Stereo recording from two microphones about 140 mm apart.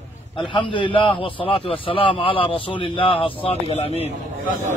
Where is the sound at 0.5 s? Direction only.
35° left (ahead or behind).